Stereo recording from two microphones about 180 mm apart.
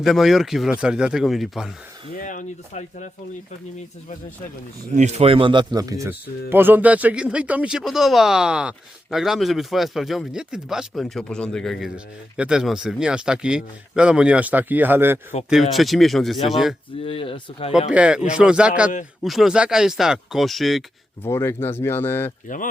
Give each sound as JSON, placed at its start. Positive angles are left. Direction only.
{"t": 0.0, "sound": "speech", "side_deg": 0}
{"t": 2.1, "sound": "speech", "side_deg": 45}
{"t": 4.9, "sound": "speech", "side_deg": -40}
{"t": 15.7, "sound": "speech", "side_deg": 0}
{"t": 17.0, "sound": "speech", "side_deg": 30}
{"t": 17.7, "sound": "speech", "side_deg": -5}
{"t": 21.2, "sound": "speech", "side_deg": 15}
{"t": 22.5, "sound": "speech", "side_deg": 45}